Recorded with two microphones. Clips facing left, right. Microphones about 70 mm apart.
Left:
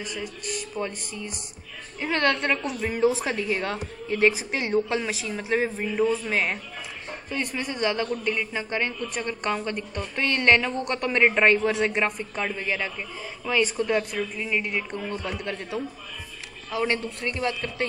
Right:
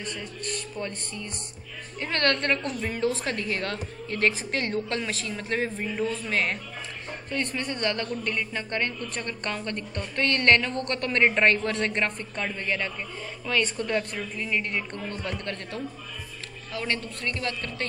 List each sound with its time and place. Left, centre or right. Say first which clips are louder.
0.0 s a woman's voice: left 2 dB; centre
16.7 s a woman's voice: left 5 dB; left